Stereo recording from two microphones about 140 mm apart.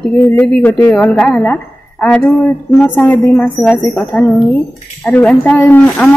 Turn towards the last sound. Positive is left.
turn(degrees=10)  # may be behind; listen again after turning